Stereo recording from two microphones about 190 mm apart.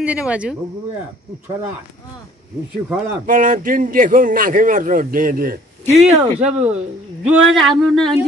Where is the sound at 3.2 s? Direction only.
45° right (ahead or behind).